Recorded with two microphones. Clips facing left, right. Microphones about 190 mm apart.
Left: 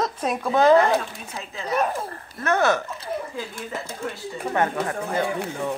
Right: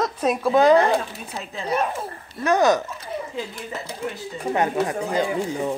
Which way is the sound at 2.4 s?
15° right (ahead or behind).